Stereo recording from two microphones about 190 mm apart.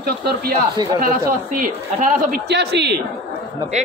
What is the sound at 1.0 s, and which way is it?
A man's voice, 45° right (ahead or behind).